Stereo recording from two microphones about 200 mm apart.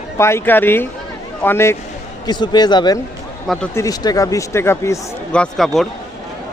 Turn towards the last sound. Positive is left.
turn(degrees=0)  # may be behind; listen again after turning